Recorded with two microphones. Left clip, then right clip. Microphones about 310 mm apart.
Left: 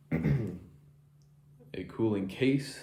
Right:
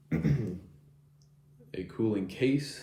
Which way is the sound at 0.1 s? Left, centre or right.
Left.